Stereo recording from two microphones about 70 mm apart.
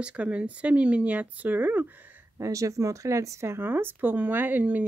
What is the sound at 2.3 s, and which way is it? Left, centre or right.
Speech, right.